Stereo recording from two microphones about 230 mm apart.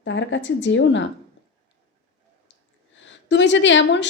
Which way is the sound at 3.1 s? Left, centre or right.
Left.